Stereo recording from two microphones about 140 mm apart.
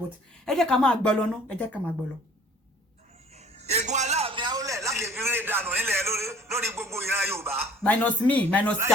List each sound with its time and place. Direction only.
0.4 s a woman's voice: centre (ahead or behind)
3.3 s a sound: 50° right (ahead or behind); by 7.7 s 15° right (ahead or behind)
7.9 s speech: 10° left (ahead or behind)